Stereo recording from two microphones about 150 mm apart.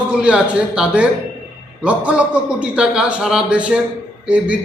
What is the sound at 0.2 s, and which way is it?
A man's voice, 10° right (ahead or behind).